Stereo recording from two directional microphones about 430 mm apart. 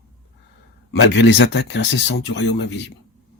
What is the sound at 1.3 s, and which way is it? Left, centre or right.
Speech, left.